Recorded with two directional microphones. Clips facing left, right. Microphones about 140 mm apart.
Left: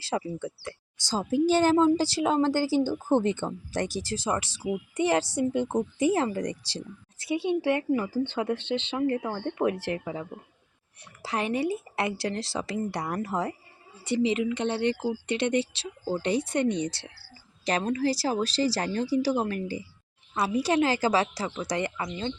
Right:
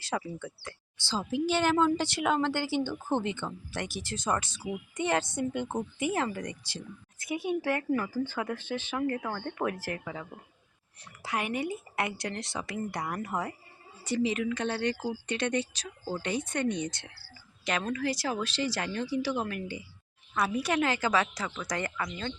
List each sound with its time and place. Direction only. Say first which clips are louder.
0.0 s speech: left 4 dB; 35° left (ahead or behind)